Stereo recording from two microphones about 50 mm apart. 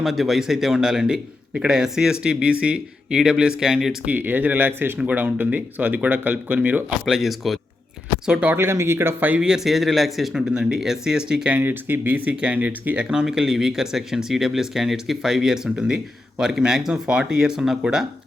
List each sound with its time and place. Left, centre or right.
0.0 s a man's voice: centre
4.0 s speech: right
7.0 s speech: centre
8.5 s speech: right
9.6 s speech: centre
10.3 s a man's voice: centre
11.5 s speech: right
12.2 s speech: right
13.1 s a man's voice: centre